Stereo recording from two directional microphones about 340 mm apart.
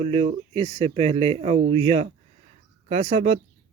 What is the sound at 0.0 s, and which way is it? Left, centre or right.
Speech, centre.